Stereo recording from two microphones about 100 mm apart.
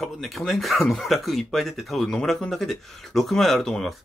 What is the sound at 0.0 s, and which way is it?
Speech, centre (ahead or behind).